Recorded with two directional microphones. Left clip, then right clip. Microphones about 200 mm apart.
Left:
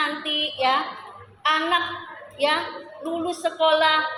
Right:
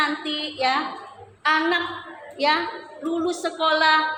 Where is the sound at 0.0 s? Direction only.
20° right (ahead or behind).